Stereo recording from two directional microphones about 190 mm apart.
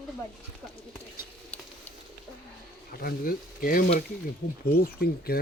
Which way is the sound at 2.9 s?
50° left (ahead or behind).